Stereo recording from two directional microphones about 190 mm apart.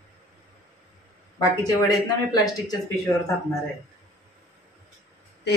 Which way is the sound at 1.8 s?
20° left (ahead or behind).